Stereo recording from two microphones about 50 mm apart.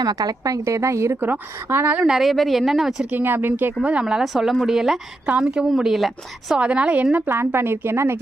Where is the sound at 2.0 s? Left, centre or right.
Centre.